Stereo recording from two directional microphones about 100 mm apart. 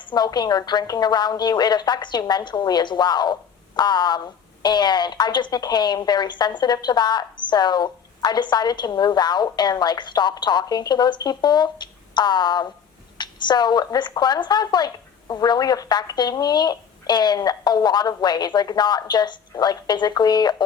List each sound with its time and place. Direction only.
0.0 s a woman's voice: 45° left (ahead or behind)